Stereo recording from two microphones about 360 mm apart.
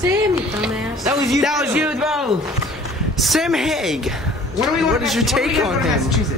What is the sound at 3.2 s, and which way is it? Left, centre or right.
A man's voice, centre.